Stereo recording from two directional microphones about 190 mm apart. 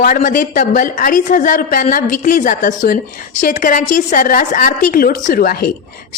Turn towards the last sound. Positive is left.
turn(degrees=50)  # may be behind; listen again after turning